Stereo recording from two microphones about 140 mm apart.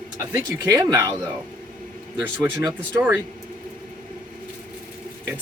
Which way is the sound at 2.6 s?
30° right (ahead or behind).